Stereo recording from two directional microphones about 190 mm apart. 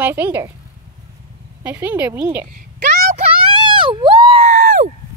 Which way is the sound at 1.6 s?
10° right (ahead or behind).